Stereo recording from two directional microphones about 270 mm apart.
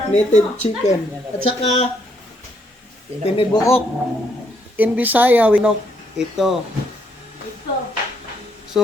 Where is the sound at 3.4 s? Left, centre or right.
Centre.